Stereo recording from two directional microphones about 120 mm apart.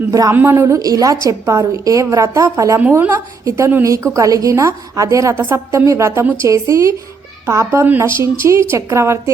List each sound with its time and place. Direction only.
0.1 s a woman's voice: 30° right (ahead or behind)
2.9 s a woman's voice: 15° right (ahead or behind)